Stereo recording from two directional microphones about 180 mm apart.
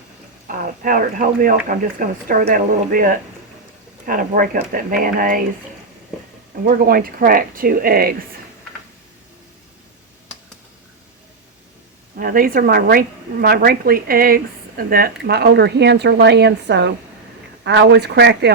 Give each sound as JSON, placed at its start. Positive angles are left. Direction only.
{"t": 0.4, "sound": "speech", "side_deg": -50}
{"t": 6.7, "sound": "a woman's voice", "side_deg": -55}
{"t": 12.1, "sound": "a woman's voice", "side_deg": -55}